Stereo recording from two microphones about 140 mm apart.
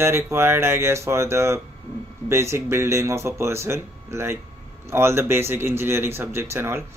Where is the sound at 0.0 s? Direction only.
20° right (ahead or behind).